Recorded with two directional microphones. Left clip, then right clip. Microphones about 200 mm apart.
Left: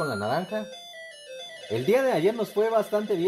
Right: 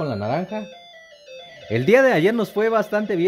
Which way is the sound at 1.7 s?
40° right (ahead or behind).